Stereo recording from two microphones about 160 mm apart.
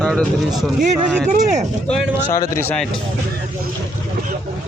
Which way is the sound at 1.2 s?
45° right (ahead or behind).